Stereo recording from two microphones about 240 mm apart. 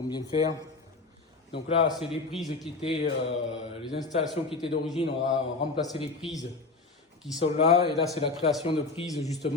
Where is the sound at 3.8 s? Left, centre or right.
Centre.